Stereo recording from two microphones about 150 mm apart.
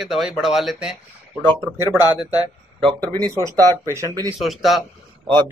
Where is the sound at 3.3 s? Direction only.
20° right (ahead or behind).